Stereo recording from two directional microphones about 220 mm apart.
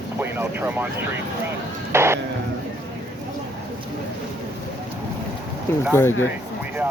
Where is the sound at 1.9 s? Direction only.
10° right (ahead or behind).